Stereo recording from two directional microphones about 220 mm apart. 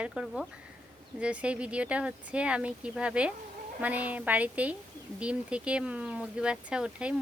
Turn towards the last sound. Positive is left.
turn(degrees=-5)  # may be behind; listen again after turning